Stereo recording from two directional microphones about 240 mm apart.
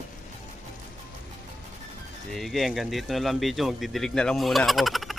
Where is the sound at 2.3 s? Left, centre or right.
Centre.